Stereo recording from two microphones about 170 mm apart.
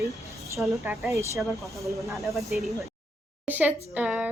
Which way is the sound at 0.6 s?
10° right (ahead or behind).